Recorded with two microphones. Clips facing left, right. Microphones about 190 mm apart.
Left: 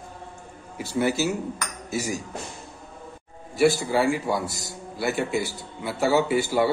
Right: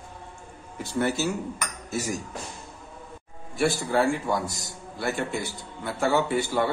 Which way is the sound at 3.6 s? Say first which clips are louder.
Left 3 dB; 5° left (ahead or behind).